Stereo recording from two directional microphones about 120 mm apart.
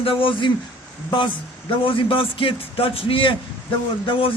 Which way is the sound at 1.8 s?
50° left (ahead or behind).